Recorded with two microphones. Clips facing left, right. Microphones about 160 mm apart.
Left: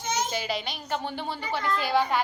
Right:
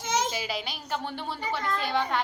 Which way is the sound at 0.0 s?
90° right.